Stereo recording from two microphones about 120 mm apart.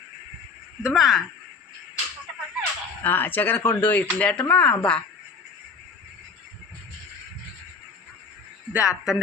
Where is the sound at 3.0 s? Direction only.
15° left (ahead or behind).